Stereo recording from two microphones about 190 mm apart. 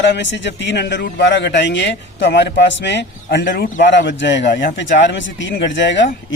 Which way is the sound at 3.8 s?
65° left (ahead or behind).